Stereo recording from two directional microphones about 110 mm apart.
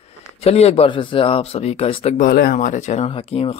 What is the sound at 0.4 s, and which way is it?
Speech, 65° left (ahead or behind).